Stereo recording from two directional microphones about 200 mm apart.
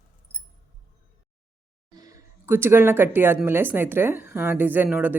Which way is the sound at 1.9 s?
20° right (ahead or behind).